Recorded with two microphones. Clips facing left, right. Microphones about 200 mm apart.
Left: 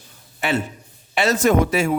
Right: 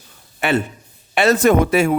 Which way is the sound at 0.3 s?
60° right (ahead or behind).